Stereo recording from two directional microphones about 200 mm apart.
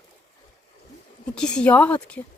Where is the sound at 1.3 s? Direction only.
5° left (ahead or behind).